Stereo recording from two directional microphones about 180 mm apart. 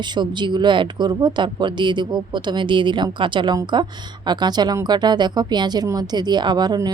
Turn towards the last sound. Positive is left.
turn(degrees=-20)  # may be behind; listen again after turning